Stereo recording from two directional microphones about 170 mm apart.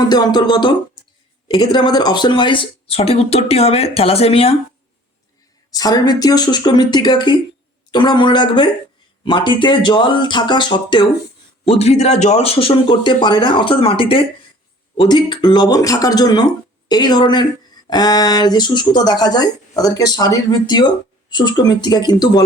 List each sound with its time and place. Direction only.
0.1 s speech: 25° left (ahead or behind)
5.7 s speech: 20° left (ahead or behind)
11.8 s speech: 40° left (ahead or behind); by 22.1 s 25° left (ahead or behind)